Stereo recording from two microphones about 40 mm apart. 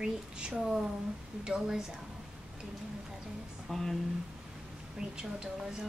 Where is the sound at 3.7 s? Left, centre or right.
Centre.